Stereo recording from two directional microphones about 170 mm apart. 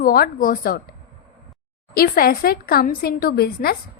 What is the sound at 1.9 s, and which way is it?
A woman's voice, 60° left (ahead or behind).